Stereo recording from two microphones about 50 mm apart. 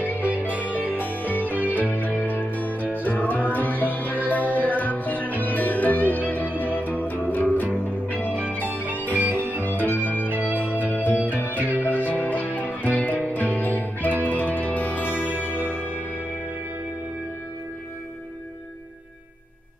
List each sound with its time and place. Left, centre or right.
0.0 s music: left
0.3 s music: right
0.9 s music: left
9.2 s music: right
9.6 s organ: left
10.2 s music: right
10.6 s music: left
11.5 s music: right
11.8 s music: left